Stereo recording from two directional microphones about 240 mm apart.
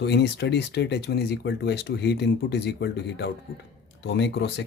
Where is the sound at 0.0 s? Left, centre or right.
Left.